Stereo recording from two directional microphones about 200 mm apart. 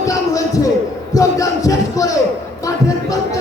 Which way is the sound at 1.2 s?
15° left (ahead or behind).